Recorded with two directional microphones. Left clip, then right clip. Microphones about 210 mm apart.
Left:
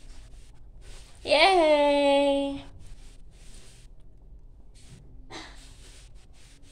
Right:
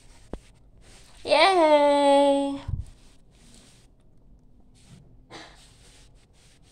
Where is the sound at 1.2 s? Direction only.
15° right (ahead or behind).